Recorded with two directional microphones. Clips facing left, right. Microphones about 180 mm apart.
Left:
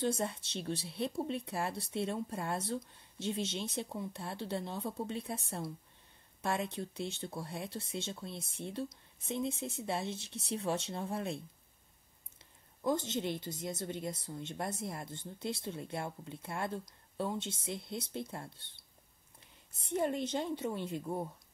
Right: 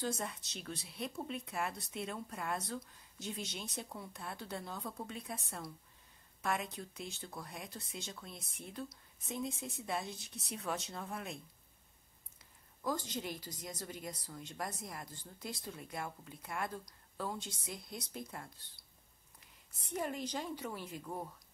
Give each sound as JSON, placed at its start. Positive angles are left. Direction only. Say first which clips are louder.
{"t": 0.0, "sound": "a woman's voice", "louder": "left 5 dB", "side_deg": 30}